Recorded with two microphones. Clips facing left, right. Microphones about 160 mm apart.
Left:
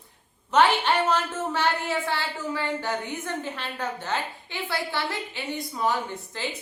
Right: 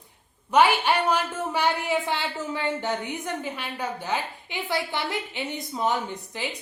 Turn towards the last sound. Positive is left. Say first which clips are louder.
# right 1 dB
turn(degrees=-20)  # may be behind; listen again after turning